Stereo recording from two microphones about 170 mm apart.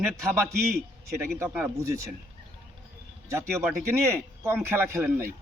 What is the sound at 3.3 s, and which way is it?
A man's voice, 15° right (ahead or behind).